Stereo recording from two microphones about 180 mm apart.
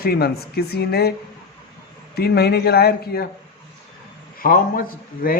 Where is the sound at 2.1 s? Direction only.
60° left (ahead or behind).